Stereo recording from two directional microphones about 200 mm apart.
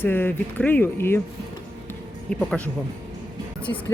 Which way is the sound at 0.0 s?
10° left (ahead or behind).